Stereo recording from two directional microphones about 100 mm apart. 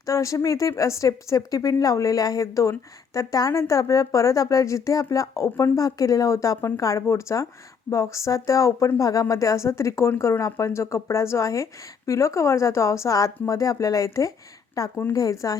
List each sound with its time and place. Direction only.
0.0 s speech: 30° left (ahead or behind)